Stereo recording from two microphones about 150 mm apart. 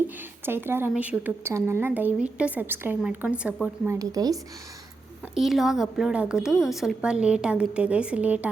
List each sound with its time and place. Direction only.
0.4 s a woman's voice: 15° right (ahead or behind)
3.9 s speech: 25° right (ahead or behind)
5.3 s speech: centre (ahead or behind)